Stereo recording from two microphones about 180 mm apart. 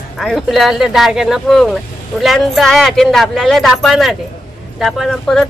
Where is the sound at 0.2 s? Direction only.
Centre (ahead or behind).